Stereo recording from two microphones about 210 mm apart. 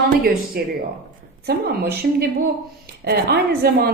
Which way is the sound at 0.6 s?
50° right (ahead or behind).